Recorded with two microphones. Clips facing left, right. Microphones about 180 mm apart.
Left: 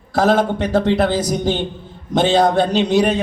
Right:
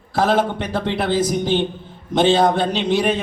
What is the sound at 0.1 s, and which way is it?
A man's voice, 45° left (ahead or behind).